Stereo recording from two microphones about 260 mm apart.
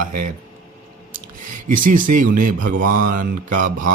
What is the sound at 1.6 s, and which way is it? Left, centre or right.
Speech, right.